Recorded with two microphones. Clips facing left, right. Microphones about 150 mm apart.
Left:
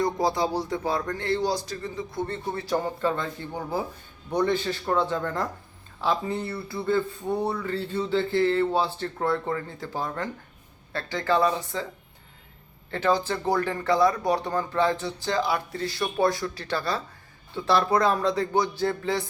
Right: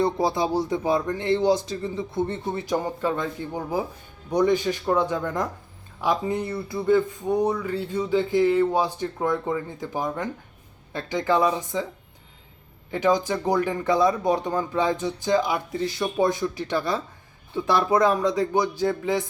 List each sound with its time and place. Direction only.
0.0 s a man's voice: 20° right (ahead or behind)
12.9 s speech: 15° right (ahead or behind)